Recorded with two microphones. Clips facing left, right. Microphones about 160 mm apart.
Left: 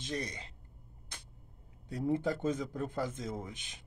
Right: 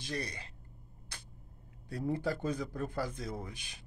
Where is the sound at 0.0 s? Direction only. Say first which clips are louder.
Left 1 dB; 20° left (ahead or behind).